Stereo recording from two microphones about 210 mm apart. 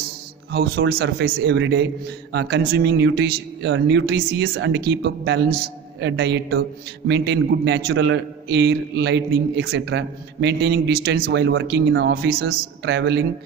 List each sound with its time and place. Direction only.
0.5 s a man's voice: 50° right (ahead or behind)